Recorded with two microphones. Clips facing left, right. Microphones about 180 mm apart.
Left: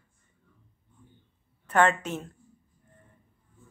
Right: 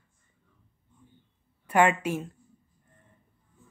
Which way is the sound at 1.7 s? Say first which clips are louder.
Right 1 dB; 10° right (ahead or behind).